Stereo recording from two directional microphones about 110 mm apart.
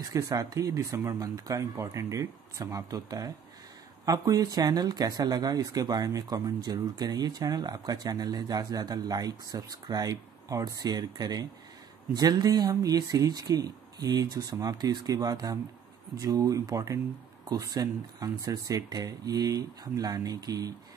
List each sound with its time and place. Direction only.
0.0 s speech: 30° right (ahead or behind)